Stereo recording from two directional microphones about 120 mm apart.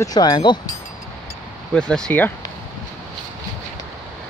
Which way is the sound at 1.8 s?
5° left (ahead or behind).